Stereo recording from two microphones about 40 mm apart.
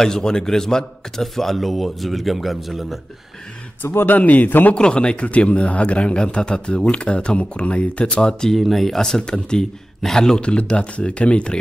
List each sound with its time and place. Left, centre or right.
0.0 s a man's voice: centre
3.8 s speech: left
4.2 s a man's voice: left
4.7 s a man's voice: left
8.5 s speech: centre
9.2 s a man's voice: centre
10.4 s a man's voice: left